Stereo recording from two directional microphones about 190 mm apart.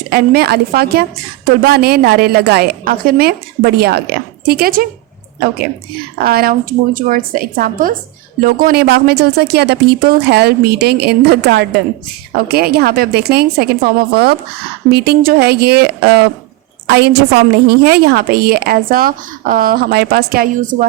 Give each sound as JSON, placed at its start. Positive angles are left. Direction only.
{"t": 0.1, "sound": "a woman's voice", "side_deg": -60}
{"t": 6.2, "sound": "a woman's voice", "side_deg": -50}